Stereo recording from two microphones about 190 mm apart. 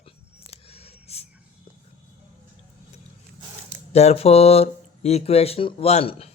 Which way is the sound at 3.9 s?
35° left (ahead or behind).